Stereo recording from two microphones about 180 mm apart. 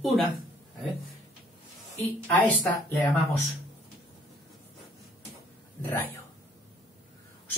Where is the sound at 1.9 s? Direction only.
10° left (ahead or behind).